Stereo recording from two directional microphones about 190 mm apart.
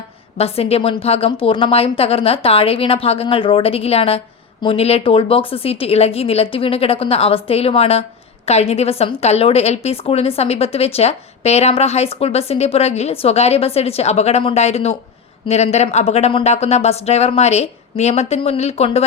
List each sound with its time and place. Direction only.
0.3 s a woman's voice: 30° left (ahead or behind)